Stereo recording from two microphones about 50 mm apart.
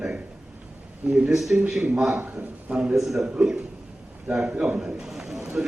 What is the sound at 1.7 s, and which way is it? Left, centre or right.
A man's voice, centre.